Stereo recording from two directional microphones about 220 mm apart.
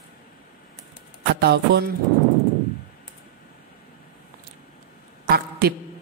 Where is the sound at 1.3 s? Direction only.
45° right (ahead or behind).